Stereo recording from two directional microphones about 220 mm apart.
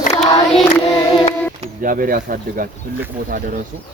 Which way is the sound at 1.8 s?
40° right (ahead or behind).